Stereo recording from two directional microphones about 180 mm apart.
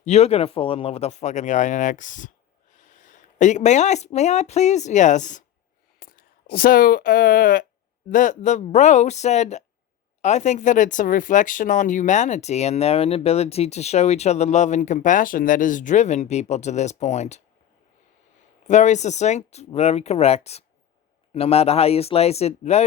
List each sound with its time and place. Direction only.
0.0 s speech: 35° left (ahead or behind)
6.0 s speech: 55° left (ahead or behind); by 17.4 s 40° left (ahead or behind)
18.7 s speech: 40° left (ahead or behind)